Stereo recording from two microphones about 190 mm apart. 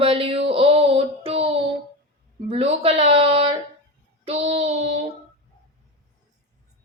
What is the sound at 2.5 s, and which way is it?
Speech, 30° right (ahead or behind).